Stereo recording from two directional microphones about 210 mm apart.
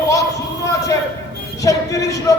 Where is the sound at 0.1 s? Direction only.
15° left (ahead or behind).